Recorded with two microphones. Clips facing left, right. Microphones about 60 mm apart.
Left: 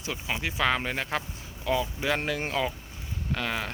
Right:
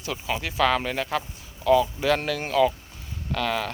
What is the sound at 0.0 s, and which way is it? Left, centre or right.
Speech, centre.